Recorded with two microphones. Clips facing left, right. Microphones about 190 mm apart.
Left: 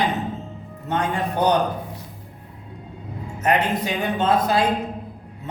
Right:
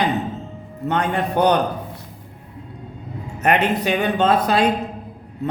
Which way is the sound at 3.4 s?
70° right (ahead or behind).